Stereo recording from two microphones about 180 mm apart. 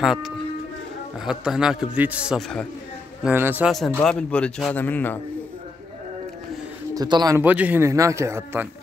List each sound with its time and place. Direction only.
0.0 s a man's voice: centre (ahead or behind)
4.0 s speech: 5° left (ahead or behind)
6.9 s a man's voice: 20° right (ahead or behind)
7.4 s speech: 10° right (ahead or behind)